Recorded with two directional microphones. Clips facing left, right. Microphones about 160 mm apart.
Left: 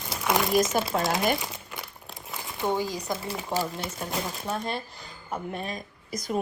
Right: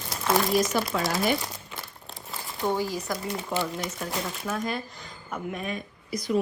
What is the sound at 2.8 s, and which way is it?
Speech, 20° left (ahead or behind).